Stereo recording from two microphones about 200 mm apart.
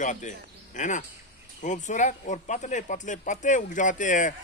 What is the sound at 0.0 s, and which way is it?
Speech, 40° left (ahead or behind).